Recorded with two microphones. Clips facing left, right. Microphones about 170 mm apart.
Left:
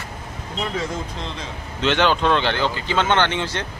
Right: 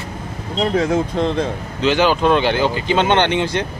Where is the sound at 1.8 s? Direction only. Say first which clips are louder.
Right 3 dB; 5° right (ahead or behind).